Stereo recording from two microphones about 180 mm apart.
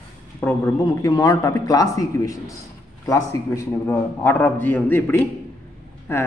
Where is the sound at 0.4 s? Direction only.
15° left (ahead or behind).